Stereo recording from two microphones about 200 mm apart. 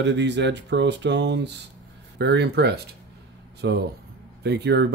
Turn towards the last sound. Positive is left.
turn(degrees=-60)  # may be behind; listen again after turning